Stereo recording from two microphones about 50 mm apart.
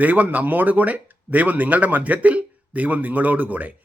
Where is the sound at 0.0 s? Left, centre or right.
Right.